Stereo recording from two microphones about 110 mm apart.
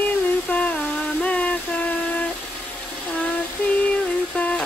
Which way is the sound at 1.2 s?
10° left (ahead or behind).